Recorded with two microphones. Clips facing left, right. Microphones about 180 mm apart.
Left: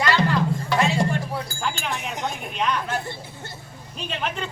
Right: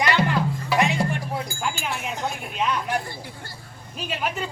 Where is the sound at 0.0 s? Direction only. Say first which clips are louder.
Left 1 dB; 15° right (ahead or behind).